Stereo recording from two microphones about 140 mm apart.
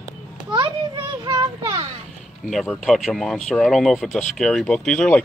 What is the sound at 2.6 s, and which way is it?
Speech, 5° left (ahead or behind).